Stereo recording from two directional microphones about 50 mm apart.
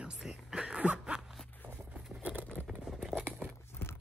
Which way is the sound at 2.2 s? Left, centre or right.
Right.